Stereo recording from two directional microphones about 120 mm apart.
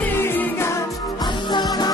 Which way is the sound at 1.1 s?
40° left (ahead or behind).